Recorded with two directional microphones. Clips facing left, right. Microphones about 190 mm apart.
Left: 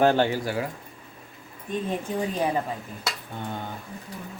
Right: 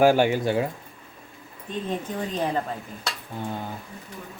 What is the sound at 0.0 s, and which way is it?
Speech, 10° right (ahead or behind).